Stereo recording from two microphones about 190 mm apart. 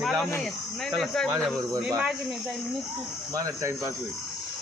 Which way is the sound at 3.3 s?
15° right (ahead or behind).